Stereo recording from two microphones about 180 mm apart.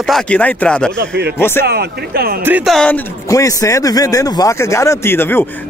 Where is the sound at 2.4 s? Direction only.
5° right (ahead or behind).